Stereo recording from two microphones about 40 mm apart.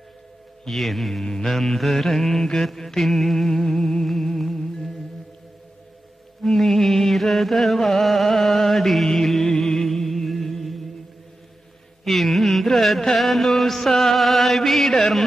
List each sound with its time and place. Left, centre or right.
0.7 s mantra: centre
6.4 s music: centre
12.0 s carnatic music: centre